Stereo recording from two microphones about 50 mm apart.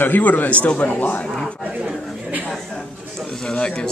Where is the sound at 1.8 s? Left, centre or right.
Right.